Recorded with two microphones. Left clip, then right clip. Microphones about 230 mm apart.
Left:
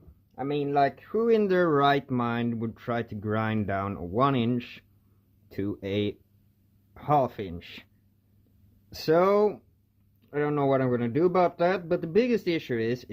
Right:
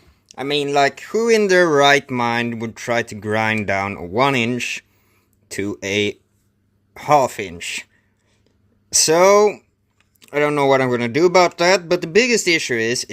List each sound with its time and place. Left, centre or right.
0.3 s speech: right
8.9 s speech: right
10.2 s speech: right